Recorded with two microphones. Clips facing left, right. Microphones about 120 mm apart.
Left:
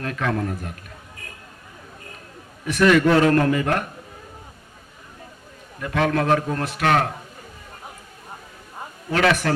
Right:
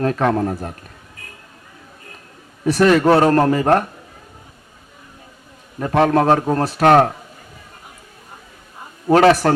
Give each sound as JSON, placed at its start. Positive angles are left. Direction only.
{"t": 0.0, "sound": "a man's voice", "side_deg": -35}
{"t": 2.6, "sound": "a man's voice", "side_deg": -35}
{"t": 5.8, "sound": "a man's voice", "side_deg": -35}
{"t": 9.0, "sound": "a man's voice", "side_deg": -35}